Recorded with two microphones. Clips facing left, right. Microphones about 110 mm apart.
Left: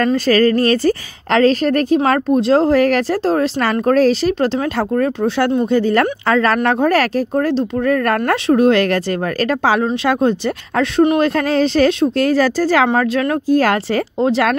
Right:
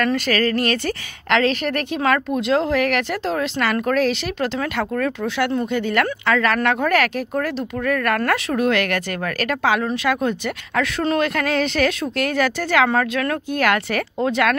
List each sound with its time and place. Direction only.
0.0 s a woman's voice: 35° left (ahead or behind)